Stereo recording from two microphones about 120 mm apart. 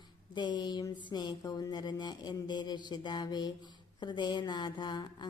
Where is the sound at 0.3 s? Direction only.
40° left (ahead or behind).